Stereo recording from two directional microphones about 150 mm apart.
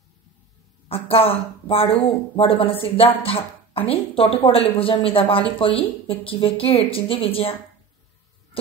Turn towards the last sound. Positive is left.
turn(degrees=40)  # may be behind; listen again after turning